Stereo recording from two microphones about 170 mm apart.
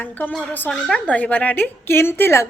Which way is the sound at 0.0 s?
10° left (ahead or behind).